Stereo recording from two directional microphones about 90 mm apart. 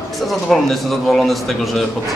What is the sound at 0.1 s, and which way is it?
Speech, centre (ahead or behind).